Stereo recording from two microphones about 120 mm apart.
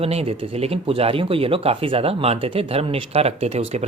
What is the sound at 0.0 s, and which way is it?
A man's voice, 55° right (ahead or behind).